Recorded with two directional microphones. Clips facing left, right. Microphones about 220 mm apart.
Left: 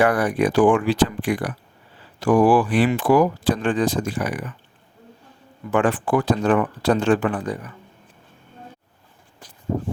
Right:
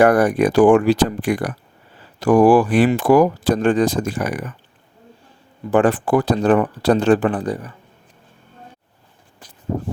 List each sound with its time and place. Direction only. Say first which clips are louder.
0.0 s speech: right 5 dB; 45° right (ahead or behind)
5.7 s speech: right 4 dB; 40° right (ahead or behind)